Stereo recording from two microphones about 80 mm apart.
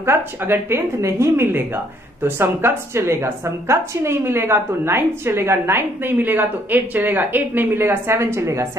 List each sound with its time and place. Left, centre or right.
0.0 s a woman's voice: right